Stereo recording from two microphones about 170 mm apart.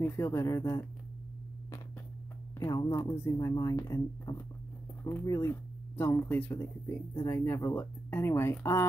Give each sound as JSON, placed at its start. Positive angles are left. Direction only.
{"t": 0.0, "sound": "speech", "side_deg": 15}
{"t": 2.6, "sound": "speech", "side_deg": 20}